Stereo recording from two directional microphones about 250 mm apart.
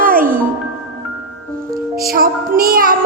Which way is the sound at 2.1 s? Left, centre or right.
Right.